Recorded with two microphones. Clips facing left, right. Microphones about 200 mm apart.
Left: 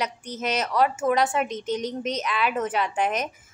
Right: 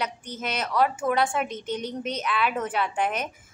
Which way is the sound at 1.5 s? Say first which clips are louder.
Left 3 dB; 35° left (ahead or behind).